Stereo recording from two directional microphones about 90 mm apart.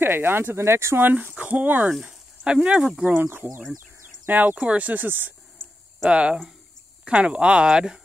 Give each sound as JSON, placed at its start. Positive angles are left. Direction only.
{"t": 0.0, "sound": "speech", "side_deg": -25}
{"t": 4.3, "sound": "speech", "side_deg": -15}